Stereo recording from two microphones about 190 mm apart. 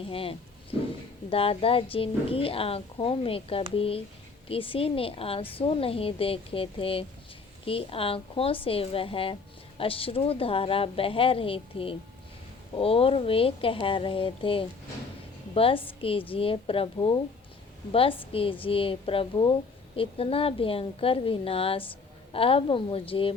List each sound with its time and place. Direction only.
0.1 s a woman's voice: 30° left (ahead or behind)